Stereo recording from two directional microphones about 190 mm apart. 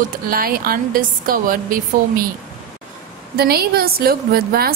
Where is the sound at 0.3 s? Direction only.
50° right (ahead or behind).